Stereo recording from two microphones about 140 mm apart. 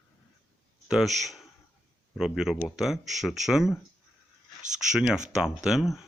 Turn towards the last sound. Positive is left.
turn(degrees=0)  # may be behind; listen again after turning